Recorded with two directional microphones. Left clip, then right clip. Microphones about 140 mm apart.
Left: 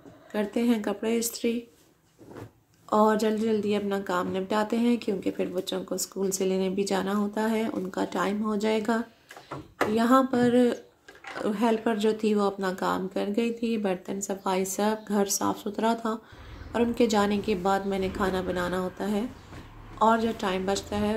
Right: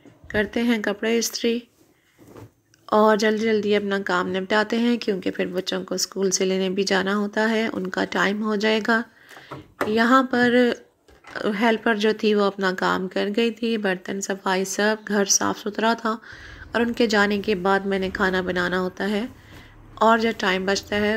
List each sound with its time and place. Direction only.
0.3 s speech: 20° right (ahead or behind)
2.9 s a woman's voice: 15° right (ahead or behind)